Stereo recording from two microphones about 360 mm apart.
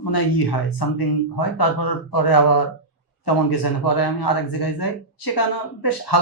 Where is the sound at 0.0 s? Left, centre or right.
Left.